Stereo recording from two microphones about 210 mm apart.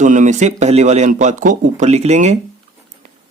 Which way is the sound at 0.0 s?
35° right (ahead or behind).